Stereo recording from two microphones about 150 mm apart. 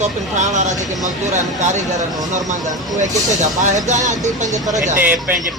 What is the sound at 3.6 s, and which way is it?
Speech, 50° right (ahead or behind).